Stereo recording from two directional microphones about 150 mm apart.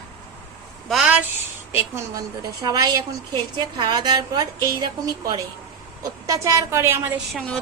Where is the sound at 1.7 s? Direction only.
20° right (ahead or behind).